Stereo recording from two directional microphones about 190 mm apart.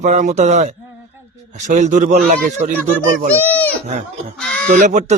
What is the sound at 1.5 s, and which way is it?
Speech, 40° right (ahead or behind).